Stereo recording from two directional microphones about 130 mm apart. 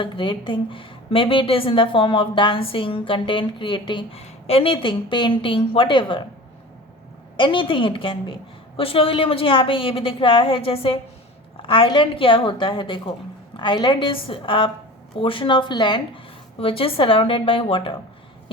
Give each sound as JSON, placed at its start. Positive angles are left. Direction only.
{"t": 0.0, "sound": "a woman's voice", "side_deg": 40}
{"t": 4.2, "sound": "a woman's voice", "side_deg": 50}
{"t": 7.3, "sound": "a woman's voice", "side_deg": 40}